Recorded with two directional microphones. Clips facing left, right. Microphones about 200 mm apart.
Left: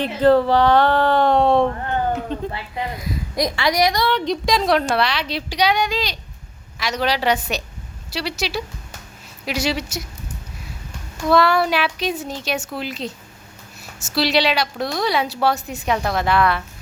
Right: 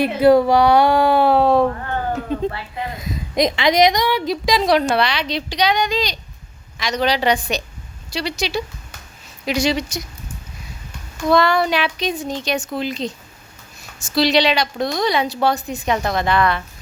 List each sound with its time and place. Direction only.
0.0 s speech: 10° right (ahead or behind)
3.0 s speech: 20° right (ahead or behind)
4.2 s a woman's voice: centre (ahead or behind)
11.3 s a woman's voice: 5° left (ahead or behind)